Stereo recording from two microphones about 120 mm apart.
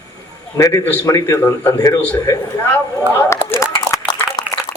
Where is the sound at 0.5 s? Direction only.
25° left (ahead or behind).